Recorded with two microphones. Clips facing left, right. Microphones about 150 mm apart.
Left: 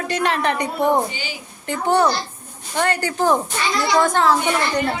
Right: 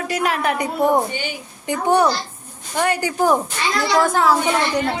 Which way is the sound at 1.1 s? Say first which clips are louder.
Right 4 dB; 55° right (ahead or behind).